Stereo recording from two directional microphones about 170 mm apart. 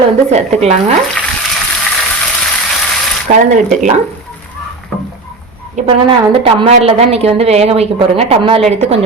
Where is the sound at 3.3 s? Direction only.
45° right (ahead or behind).